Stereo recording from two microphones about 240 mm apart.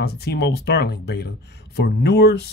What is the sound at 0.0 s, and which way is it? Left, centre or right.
Speech, left.